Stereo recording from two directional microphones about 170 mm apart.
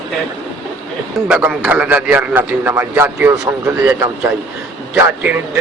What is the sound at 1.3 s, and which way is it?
A man's voice, 10° right (ahead or behind).